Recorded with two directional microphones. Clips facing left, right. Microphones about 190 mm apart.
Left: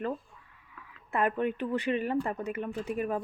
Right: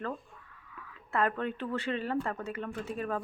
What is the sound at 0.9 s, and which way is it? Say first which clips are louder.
Speech: left 1 dB; 15° left (ahead or behind).